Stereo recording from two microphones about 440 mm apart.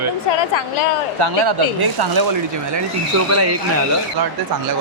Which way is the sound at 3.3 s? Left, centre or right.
Right.